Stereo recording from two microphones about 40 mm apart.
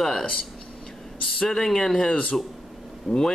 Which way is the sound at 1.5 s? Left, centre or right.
Centre.